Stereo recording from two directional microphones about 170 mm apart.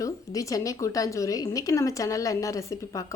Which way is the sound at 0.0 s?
20° left (ahead or behind).